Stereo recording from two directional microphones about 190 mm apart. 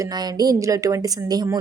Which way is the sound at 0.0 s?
20° right (ahead or behind).